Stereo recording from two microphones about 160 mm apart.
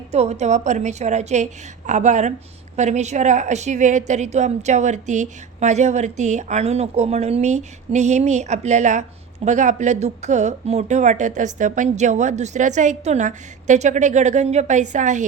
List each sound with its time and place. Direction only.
0.1 s a woman's voice: 45° right (ahead or behind)